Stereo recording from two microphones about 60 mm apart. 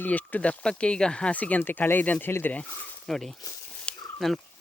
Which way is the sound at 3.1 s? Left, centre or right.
Centre.